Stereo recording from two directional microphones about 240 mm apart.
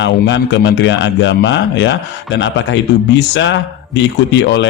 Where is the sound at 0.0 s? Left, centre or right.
Left.